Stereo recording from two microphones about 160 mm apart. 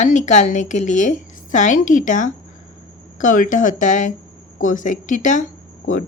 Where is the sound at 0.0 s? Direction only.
50° left (ahead or behind).